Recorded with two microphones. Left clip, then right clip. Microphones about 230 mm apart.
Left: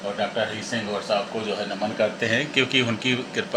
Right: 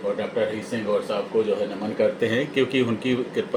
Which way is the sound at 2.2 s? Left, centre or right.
Centre.